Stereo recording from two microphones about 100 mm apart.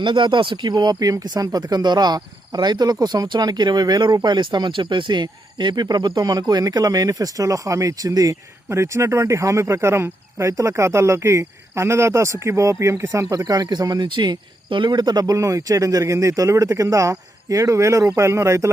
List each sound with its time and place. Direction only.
0.0 s speech: 55° right (ahead or behind); by 18.7 s 30° right (ahead or behind)